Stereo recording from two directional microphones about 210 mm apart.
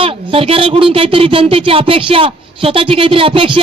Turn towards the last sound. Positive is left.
turn(degrees=-25)  # may be behind; listen again after turning